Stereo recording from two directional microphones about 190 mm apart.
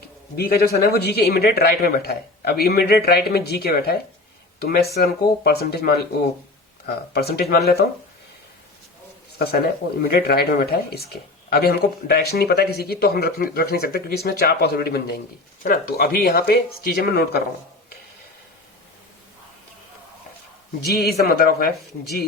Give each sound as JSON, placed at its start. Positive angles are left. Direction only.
{"t": 0.3, "sound": "a man's voice", "side_deg": 50}
{"t": 10.1, "sound": "speech", "side_deg": 50}
{"t": 20.8, "sound": "speech", "side_deg": 55}